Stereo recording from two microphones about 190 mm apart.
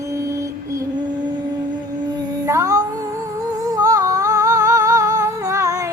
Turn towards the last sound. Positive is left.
turn(degrees=-15)  # may be behind; listen again after turning